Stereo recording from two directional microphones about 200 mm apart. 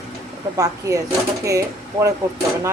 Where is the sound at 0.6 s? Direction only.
15° right (ahead or behind).